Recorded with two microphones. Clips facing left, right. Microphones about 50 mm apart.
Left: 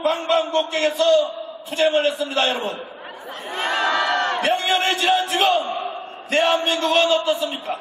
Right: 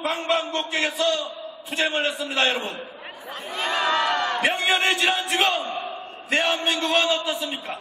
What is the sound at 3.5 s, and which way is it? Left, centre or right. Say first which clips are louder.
Speech: left 3 dB; left.